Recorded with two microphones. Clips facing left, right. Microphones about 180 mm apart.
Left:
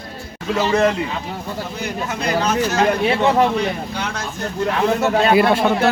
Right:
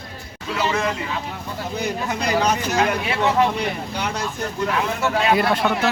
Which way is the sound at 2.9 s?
35° left (ahead or behind).